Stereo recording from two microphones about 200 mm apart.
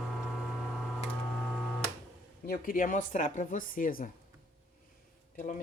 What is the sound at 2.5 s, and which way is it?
Speech, 45° left (ahead or behind).